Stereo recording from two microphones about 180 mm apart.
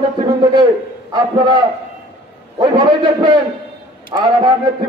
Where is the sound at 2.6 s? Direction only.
25° right (ahead or behind).